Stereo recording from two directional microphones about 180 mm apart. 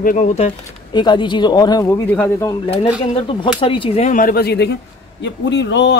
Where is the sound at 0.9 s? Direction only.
25° left (ahead or behind).